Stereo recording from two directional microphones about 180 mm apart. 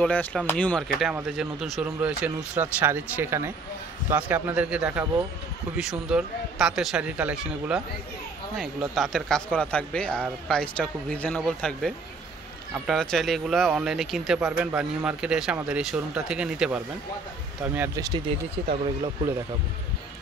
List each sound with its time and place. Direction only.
0.0 s speech: 5° left (ahead or behind)
1.1 s speech: 5° right (ahead or behind)
17.7 s speech: 15° right (ahead or behind)